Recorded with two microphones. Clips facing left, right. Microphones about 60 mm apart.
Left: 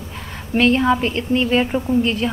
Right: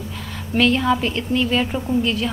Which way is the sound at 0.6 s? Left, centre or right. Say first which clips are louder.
Left 2 dB; left.